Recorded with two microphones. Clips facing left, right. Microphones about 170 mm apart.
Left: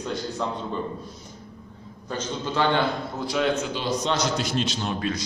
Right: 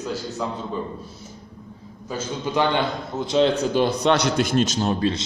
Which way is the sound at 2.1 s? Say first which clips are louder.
Right 3 dB; 10° right (ahead or behind).